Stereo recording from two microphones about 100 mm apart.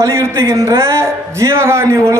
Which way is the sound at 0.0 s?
30° right (ahead or behind).